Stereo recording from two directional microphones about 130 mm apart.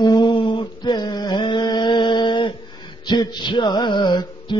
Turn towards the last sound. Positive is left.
turn(degrees=35)  # may be behind; listen again after turning